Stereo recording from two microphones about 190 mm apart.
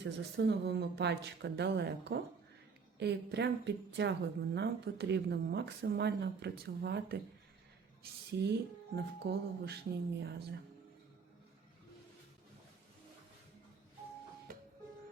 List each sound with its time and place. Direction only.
0.0 s a woman's voice: 65° right (ahead or behind)
8.3 s a woman's voice: 60° right (ahead or behind)
14.5 s music: 45° right (ahead or behind)